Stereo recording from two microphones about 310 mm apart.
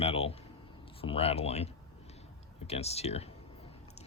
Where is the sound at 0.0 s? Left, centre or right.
Centre.